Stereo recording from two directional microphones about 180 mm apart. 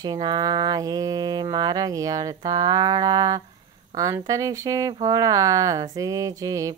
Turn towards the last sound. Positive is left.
turn(degrees=-20)  # may be behind; listen again after turning